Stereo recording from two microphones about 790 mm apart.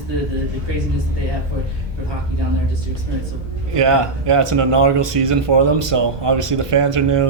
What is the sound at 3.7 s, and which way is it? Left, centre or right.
Speech, right.